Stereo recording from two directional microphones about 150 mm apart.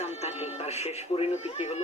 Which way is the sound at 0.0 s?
45° left (ahead or behind).